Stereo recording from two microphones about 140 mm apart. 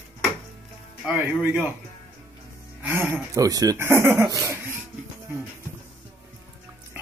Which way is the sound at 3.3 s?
25° right (ahead or behind).